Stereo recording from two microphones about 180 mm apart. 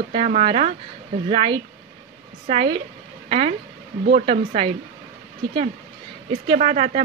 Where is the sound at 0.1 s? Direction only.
35° right (ahead or behind).